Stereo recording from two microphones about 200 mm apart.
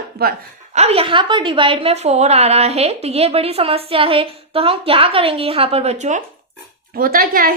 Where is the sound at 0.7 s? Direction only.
30° right (ahead or behind).